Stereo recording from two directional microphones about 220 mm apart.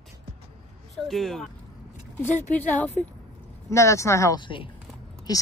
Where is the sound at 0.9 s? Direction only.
Centre (ahead or behind).